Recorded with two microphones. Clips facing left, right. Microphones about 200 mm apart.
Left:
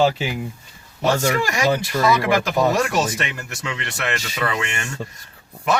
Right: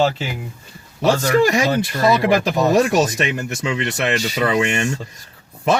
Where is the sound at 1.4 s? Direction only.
20° right (ahead or behind).